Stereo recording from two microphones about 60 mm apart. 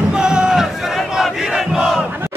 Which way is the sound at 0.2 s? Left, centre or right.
Centre.